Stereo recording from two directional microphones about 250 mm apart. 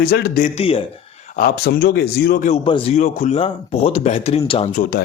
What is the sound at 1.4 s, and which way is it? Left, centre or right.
A man's voice, left.